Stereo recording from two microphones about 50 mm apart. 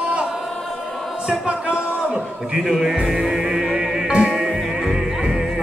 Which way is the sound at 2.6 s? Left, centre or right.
Centre.